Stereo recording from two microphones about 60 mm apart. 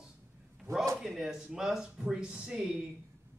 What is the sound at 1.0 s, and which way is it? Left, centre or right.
Speech, centre.